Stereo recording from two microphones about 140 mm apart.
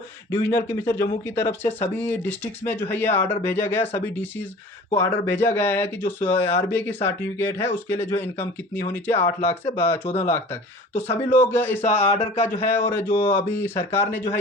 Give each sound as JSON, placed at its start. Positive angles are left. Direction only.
{"t": 0.3, "sound": "speech", "side_deg": 15}
{"t": 12.1, "sound": "speech", "side_deg": 50}
{"t": 12.6, "sound": "speech", "side_deg": 15}